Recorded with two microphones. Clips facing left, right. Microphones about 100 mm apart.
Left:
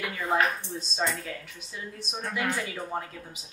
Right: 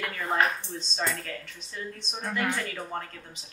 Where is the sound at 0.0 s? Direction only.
5° left (ahead or behind).